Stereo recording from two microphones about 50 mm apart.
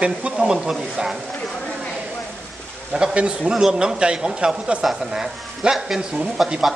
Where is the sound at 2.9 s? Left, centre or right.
Centre.